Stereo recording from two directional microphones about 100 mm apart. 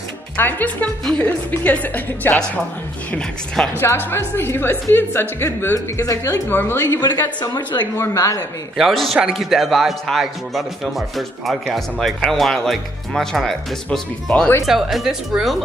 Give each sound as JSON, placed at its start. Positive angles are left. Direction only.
{"t": 0.4, "sound": "speech", "side_deg": 20}
{"t": 3.1, "sound": "speech", "side_deg": 5}
{"t": 3.8, "sound": "speech", "side_deg": 20}
{"t": 5.9, "sound": "speech", "side_deg": 35}
{"t": 6.5, "sound": "speech", "side_deg": 25}
{"t": 7.0, "sound": "speech", "side_deg": 40}
{"t": 8.1, "sound": "speech", "side_deg": 30}
{"t": 8.7, "sound": "a man's voice", "side_deg": 0}